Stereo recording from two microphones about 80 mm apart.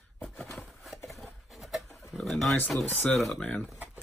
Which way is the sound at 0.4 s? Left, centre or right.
Centre.